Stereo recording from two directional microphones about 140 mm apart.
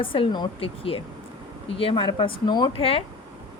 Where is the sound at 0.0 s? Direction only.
40° left (ahead or behind).